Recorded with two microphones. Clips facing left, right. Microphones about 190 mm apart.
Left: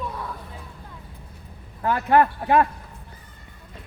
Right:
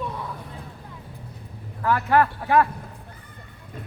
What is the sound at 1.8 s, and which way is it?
Speech, 20° left (ahead or behind).